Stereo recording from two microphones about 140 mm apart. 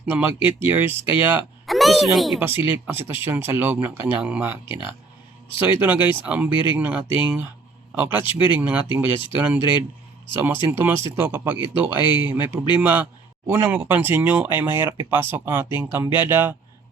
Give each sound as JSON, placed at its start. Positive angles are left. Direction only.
{"t": 0.0, "sound": "speech", "side_deg": -10}
{"t": 1.6, "sound": "speech", "side_deg": 0}
{"t": 2.4, "sound": "speech", "side_deg": -15}
{"t": 4.6, "sound": "speech", "side_deg": 35}
{"t": 5.8, "sound": "speech", "side_deg": -10}